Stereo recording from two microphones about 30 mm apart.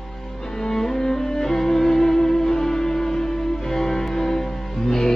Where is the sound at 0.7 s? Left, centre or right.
Centre.